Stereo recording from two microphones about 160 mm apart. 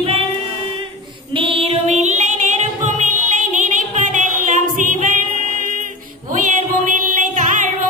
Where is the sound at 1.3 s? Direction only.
35° right (ahead or behind); by 5.9 s 55° right (ahead or behind).